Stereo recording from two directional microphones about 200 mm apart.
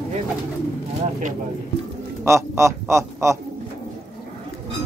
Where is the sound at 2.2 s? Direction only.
15° right (ahead or behind).